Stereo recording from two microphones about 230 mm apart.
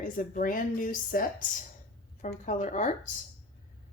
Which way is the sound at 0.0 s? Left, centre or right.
Left.